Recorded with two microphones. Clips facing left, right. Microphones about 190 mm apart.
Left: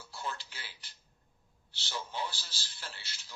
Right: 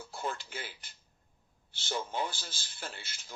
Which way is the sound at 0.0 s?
50° right (ahead or behind).